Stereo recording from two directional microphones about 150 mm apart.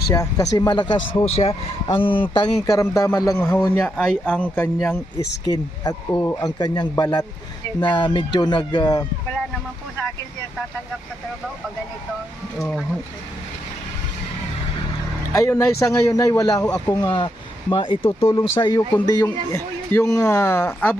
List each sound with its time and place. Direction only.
0.1 s a man's voice: 25° left (ahead or behind)
5.2 s a man's voice: 25° left (ahead or behind)
12.5 s speech: centre (ahead or behind)
15.3 s a man's voice: 20° left (ahead or behind); by 18.3 s 40° left (ahead or behind)
18.6 s a man's voice: 25° left (ahead or behind)